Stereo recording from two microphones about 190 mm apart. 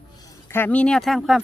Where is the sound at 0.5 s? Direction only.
10° left (ahead or behind).